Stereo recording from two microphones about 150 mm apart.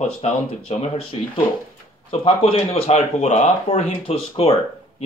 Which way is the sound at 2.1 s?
35° left (ahead or behind).